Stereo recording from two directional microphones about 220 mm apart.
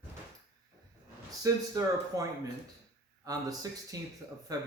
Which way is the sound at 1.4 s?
15° right (ahead or behind).